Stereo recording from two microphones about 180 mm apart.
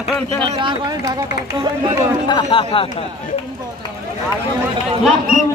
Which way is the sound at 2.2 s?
25° left (ahead or behind).